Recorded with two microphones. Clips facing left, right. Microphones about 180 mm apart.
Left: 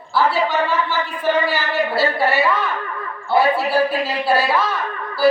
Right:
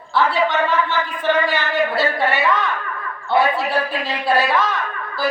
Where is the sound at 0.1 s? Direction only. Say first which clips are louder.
Even; 5° left (ahead or behind).